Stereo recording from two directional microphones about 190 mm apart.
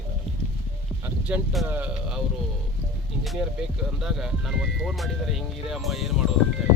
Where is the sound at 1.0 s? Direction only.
10° right (ahead or behind).